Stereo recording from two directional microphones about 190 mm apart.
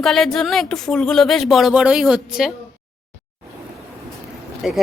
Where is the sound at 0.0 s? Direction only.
Centre (ahead or behind).